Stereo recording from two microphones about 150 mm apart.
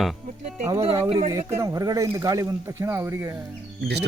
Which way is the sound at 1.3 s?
25° right (ahead or behind).